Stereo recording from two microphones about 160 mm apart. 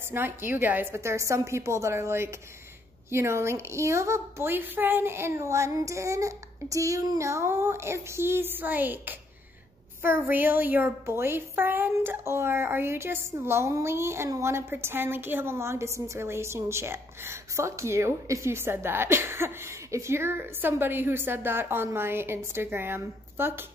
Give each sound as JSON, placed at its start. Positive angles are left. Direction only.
{"t": 0.1, "sound": "a woman's voice", "side_deg": -15}